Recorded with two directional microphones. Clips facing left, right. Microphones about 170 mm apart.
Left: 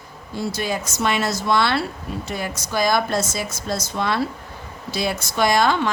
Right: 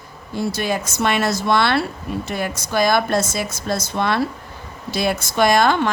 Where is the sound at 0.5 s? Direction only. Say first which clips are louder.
Right 3 dB; 60° right (ahead or behind).